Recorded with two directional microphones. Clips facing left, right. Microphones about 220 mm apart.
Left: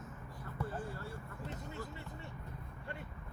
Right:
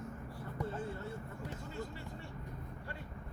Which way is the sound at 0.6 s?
25° right (ahead or behind).